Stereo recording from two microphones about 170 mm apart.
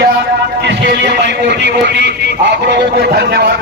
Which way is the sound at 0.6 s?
90° right.